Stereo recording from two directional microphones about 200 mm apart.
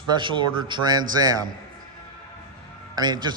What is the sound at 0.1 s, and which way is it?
A man's voice, 25° right (ahead or behind).